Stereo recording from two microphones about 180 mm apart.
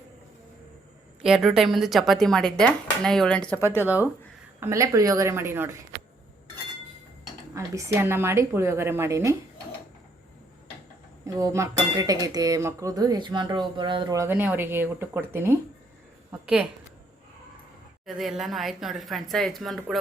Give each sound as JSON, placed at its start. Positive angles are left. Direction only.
{"t": 1.2, "sound": "speech", "side_deg": -5}
{"t": 3.7, "sound": "a woman's voice", "side_deg": -10}
{"t": 7.5, "sound": "a woman's voice", "side_deg": -15}
{"t": 11.3, "sound": "speech", "side_deg": -20}
{"t": 18.0, "sound": "speech", "side_deg": 0}